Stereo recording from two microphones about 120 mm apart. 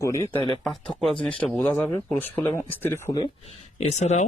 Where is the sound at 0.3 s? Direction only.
45° left (ahead or behind).